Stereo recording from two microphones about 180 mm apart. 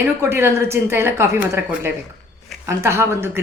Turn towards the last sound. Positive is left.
turn(degrees=-15)  # may be behind; listen again after turning